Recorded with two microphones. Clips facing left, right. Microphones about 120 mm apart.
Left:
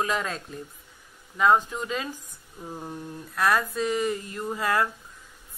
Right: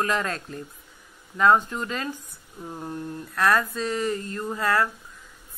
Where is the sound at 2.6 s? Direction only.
5° left (ahead or behind).